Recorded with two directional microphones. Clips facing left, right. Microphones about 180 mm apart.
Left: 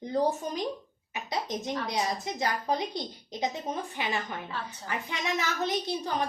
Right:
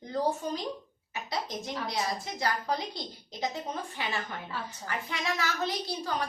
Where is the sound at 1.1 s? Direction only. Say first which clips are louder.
Left 2 dB; 20° left (ahead or behind).